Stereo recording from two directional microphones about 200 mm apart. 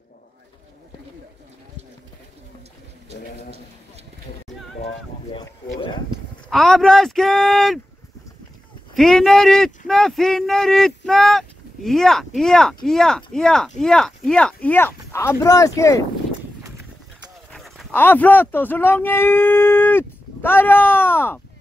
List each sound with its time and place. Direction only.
5.3 s a sound: 25° left (ahead or behind)
6.5 s speech: centre (ahead or behind)
8.9 s speech: centre (ahead or behind)
17.5 s speech: centre (ahead or behind)